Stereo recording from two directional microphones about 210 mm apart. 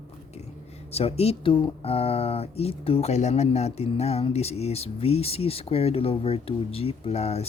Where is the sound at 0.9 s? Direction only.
30° left (ahead or behind).